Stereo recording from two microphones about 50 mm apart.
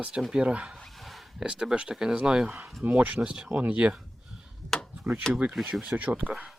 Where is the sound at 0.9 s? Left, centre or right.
Centre.